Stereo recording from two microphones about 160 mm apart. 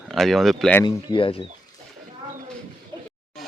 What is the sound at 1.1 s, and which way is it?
Speech, 35° left (ahead or behind).